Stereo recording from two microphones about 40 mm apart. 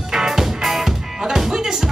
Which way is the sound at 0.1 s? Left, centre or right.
Centre.